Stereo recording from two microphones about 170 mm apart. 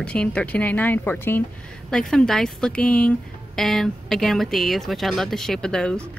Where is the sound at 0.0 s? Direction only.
5° left (ahead or behind).